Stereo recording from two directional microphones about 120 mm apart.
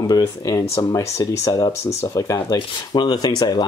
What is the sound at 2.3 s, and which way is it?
Speech, 40° left (ahead or behind).